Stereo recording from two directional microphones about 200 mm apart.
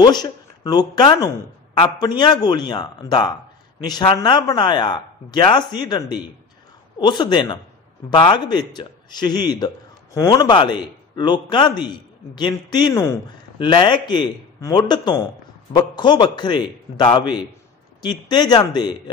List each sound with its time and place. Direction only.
0.0 s a man's voice: 20° left (ahead or behind)